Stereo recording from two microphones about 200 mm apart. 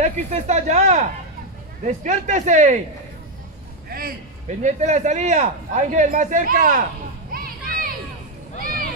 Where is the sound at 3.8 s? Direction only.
45° right (ahead or behind).